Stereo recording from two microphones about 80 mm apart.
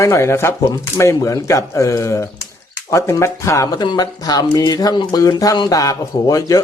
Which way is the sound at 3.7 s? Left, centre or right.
Left.